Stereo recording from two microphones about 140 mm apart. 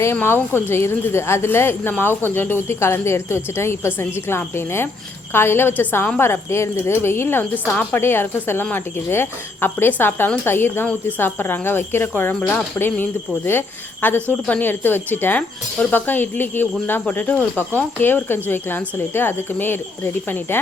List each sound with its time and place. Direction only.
0.0 s speech: 15° left (ahead or behind)